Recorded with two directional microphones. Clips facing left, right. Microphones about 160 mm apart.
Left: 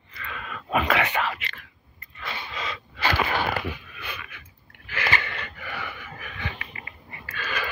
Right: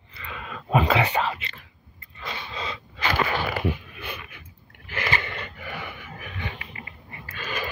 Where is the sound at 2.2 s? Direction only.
25° right (ahead or behind).